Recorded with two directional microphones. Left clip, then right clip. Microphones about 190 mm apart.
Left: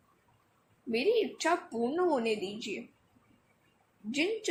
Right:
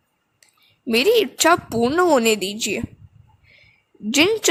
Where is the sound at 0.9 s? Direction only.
50° right (ahead or behind).